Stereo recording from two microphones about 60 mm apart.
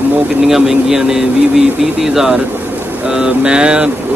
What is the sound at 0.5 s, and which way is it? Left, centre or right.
Speech, centre.